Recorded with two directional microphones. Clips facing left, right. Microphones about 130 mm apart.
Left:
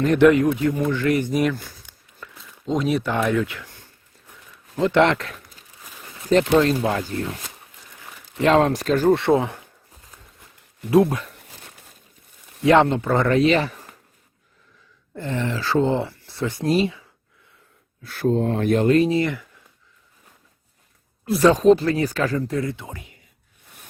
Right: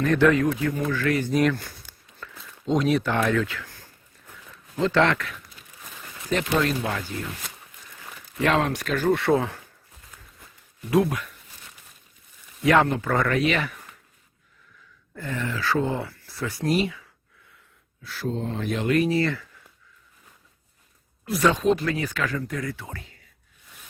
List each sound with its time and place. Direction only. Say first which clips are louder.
0.0 s speech: left 4 dB; 20° left (ahead or behind); by 1.8 s centre (ahead or behind)
1.9 s a sound: even; 10° left (ahead or behind)
2.4 s speech: even; centre (ahead or behind); by 5.2 s 20° left (ahead or behind)
5.2 s a sound: left 1 dB; 40° left (ahead or behind)
6.2 s speech: left 7 dB; 35° left (ahead or behind)
8.4 s speech: left 6 dB; 35° left (ahead or behind)
9.2 s speech: left 3 dB; 20° left (ahead or behind)
10.9 s speech: left 5 dB; 30° left (ahead or behind)
12.6 s speech: left 4 dB; 25° left (ahead or behind)
15.1 s speech: left 4 dB; 25° left (ahead or behind)
18.0 s speech: left 8 dB; 55° left (ahead or behind)
18.9 s speech: even; 25° left (ahead or behind)
21.2 s speech: left 6 dB; 35° left (ahead or behind); by 23.2 s 15° left (ahead or behind)